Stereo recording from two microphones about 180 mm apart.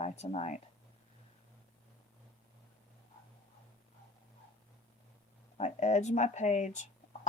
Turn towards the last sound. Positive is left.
turn(degrees=40)  # may be behind; listen again after turning